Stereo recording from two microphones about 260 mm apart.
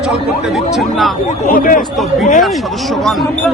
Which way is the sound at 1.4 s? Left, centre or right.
Left.